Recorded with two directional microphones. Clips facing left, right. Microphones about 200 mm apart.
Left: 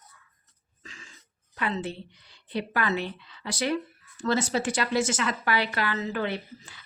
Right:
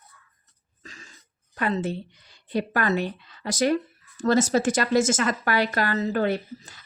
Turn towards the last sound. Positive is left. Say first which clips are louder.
# right 5 dB
turn(degrees=-45)  # may be behind; listen again after turning